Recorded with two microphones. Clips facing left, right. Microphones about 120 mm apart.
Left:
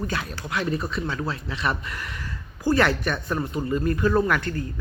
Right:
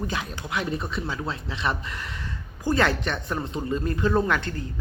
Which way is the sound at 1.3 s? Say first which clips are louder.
Left 1 dB; 25° right (ahead or behind).